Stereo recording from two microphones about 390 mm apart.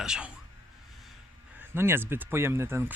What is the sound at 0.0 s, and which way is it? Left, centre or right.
Speech, centre.